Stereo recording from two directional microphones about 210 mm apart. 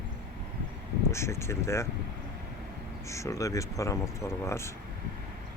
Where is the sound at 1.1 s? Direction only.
10° left (ahead or behind).